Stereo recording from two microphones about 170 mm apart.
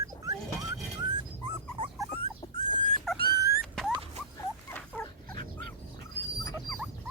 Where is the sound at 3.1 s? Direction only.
Centre (ahead or behind).